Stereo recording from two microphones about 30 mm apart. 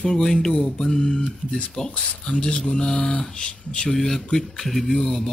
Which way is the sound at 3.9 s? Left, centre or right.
Centre.